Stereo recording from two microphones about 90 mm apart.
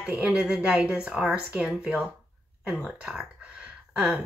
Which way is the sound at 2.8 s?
5° right (ahead or behind).